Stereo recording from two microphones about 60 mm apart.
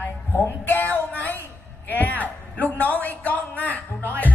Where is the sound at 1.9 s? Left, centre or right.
Left.